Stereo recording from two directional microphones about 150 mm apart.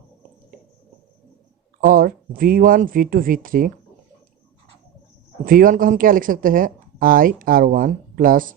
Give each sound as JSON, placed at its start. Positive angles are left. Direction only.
{"t": 1.9, "sound": "speech", "side_deg": -70}
{"t": 5.5, "sound": "speech", "side_deg": -65}